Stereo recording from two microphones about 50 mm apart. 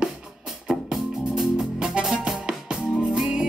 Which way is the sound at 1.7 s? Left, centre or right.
Centre.